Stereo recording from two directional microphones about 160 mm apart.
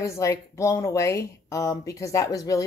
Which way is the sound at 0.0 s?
20° left (ahead or behind).